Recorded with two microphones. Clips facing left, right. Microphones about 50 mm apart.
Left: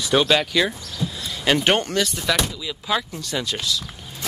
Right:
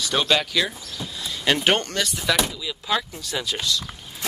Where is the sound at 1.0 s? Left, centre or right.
Centre.